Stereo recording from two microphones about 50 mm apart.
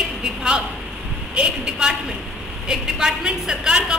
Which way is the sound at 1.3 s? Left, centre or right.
Centre.